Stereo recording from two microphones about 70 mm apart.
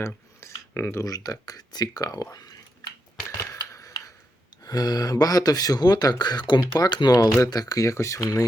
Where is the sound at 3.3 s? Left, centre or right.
Left.